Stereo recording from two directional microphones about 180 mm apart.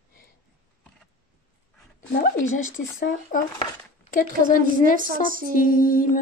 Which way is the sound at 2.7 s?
50° left (ahead or behind).